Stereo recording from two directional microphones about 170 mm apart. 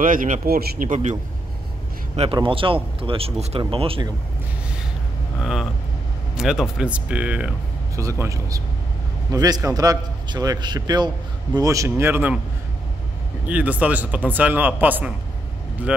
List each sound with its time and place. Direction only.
0.0 s speech: 55° right (ahead or behind)
2.3 s speech: 30° right (ahead or behind)
5.4 s a man's voice: centre (ahead or behind)
7.9 s a man's voice: 20° right (ahead or behind)
13.5 s a man's voice: 10° right (ahead or behind)